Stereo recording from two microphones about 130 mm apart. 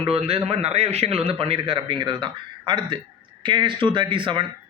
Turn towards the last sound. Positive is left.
turn(degrees=-40)  # may be behind; listen again after turning